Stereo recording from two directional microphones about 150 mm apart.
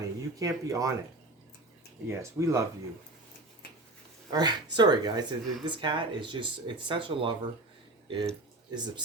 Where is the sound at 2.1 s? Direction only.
20° right (ahead or behind).